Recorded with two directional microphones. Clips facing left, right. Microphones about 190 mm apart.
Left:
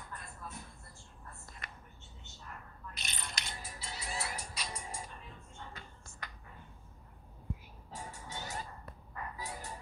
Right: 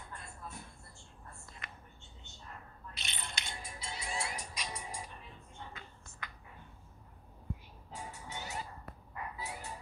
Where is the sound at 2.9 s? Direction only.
40° left (ahead or behind).